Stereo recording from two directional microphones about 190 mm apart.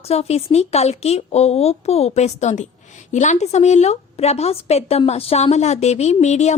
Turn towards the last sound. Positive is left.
turn(degrees=35)  # may be behind; listen again after turning